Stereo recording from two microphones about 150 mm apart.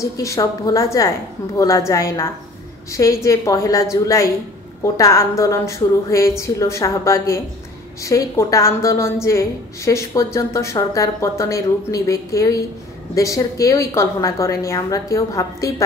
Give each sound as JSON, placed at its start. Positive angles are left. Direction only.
{"t": 0.0, "sound": "a woman's voice", "side_deg": 20}